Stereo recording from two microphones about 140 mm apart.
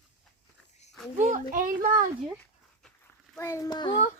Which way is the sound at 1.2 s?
60° right (ahead or behind).